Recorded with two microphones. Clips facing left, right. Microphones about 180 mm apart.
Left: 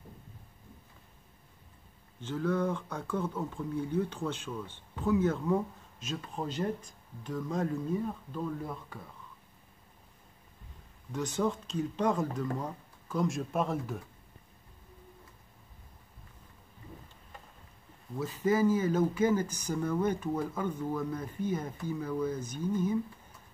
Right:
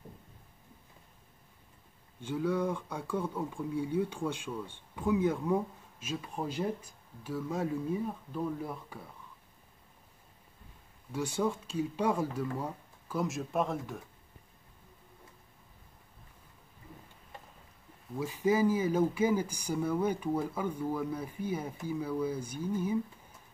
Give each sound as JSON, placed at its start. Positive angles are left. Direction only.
{"t": 2.1, "sound": "speech", "side_deg": -10}
{"t": 11.1, "sound": "speech", "side_deg": -10}
{"t": 18.1, "sound": "speech", "side_deg": -10}